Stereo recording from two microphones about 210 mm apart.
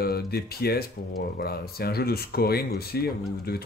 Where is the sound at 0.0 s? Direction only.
45° left (ahead or behind).